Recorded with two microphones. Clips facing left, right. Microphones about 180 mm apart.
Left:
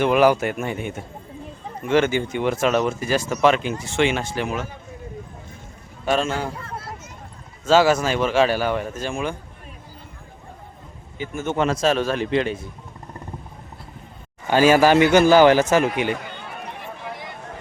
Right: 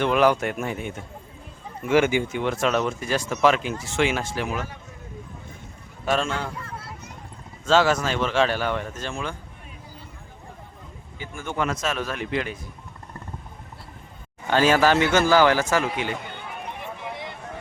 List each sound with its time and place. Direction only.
0.0 s speech: 5° left (ahead or behind); by 2.4 s 10° right (ahead or behind)
2.4 s speech: 5° left (ahead or behind)
6.1 s speech: centre (ahead or behind)
7.6 s speech: 10° left (ahead or behind)
11.2 s a man's voice: 20° left (ahead or behind)
14.4 s speech: 10° left (ahead or behind)
17.1 s a sound: 25° right (ahead or behind)